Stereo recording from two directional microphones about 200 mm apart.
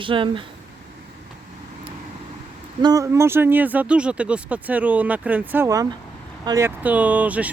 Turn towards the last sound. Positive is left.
turn(degrees=-5)  # may be behind; listen again after turning